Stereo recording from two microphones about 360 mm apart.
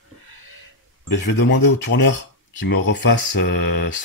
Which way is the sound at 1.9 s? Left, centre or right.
Left.